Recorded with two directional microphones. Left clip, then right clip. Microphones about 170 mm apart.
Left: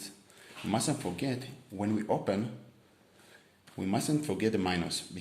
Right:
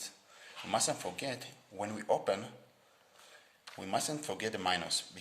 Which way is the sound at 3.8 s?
10° right (ahead or behind).